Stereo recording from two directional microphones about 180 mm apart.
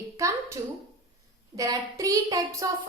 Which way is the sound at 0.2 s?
15° right (ahead or behind).